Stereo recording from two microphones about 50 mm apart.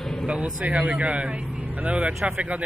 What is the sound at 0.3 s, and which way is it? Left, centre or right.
Speech, right.